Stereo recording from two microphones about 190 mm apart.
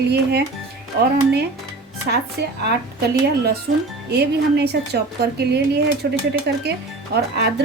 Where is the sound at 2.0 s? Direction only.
60° right (ahead or behind).